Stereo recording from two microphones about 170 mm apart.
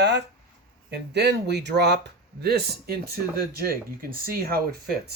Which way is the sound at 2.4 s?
70° right (ahead or behind).